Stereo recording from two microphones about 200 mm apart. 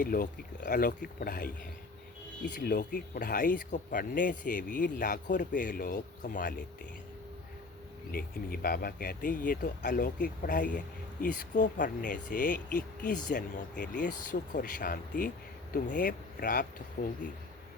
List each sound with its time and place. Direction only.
0.0 s speech: 45° left (ahead or behind)
8.1 s speech: 50° left (ahead or behind)